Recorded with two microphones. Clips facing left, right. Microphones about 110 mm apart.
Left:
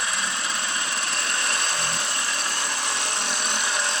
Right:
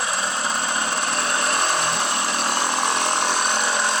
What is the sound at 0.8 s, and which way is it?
Power tool, 45° right (ahead or behind).